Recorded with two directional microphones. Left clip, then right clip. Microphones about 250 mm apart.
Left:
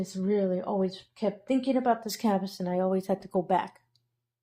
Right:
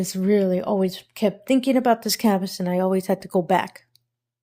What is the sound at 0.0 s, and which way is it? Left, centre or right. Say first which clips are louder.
Speech: right 7 dB; right.